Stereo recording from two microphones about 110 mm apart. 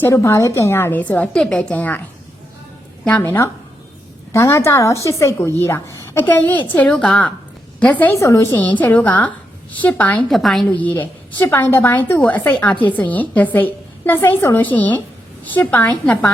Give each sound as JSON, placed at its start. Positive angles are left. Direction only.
{"t": 0.0, "sound": "a woman's voice", "side_deg": 25}
{"t": 3.0, "sound": "a woman's voice", "side_deg": 10}
{"t": 3.2, "sound": "a woman's voice", "side_deg": 20}
{"t": 10.2, "sound": "a woman's voice", "side_deg": 0}
{"t": 10.7, "sound": "a woman's voice", "side_deg": 15}